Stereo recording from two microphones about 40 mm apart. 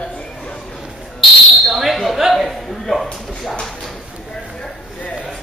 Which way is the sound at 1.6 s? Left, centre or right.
Centre.